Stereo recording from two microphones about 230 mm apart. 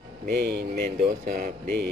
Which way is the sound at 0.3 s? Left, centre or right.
Right.